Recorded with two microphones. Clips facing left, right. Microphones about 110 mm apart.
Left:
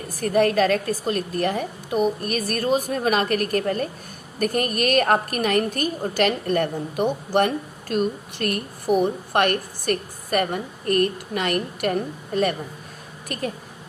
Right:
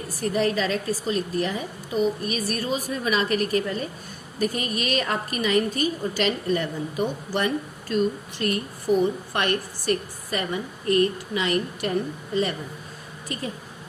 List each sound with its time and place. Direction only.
0.2 s a woman's voice: 50° left (ahead or behind)